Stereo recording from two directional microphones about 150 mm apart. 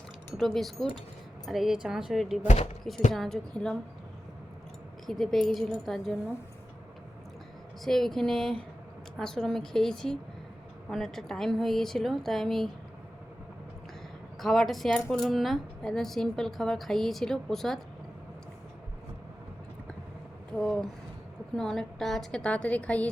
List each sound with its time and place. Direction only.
0.3 s speech: centre (ahead or behind)
2.4 s speech: 50° left (ahead or behind)
3.1 s speech: centre (ahead or behind)
5.0 s speech: centre (ahead or behind)
7.9 s speech: 5° left (ahead or behind)
14.4 s speech: centre (ahead or behind)
20.5 s speech: 5° left (ahead or behind)